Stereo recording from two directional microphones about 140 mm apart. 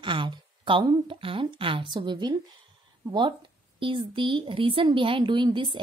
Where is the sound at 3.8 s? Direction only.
40° right (ahead or behind).